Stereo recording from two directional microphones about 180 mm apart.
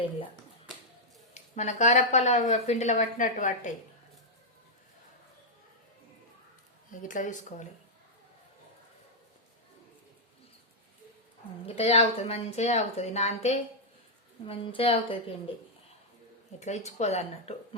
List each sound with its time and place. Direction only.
1.3 s speech: 40° left (ahead or behind)
6.9 s speech: 45° left (ahead or behind)
11.6 s speech: 35° left (ahead or behind)
16.6 s speech: 40° left (ahead or behind)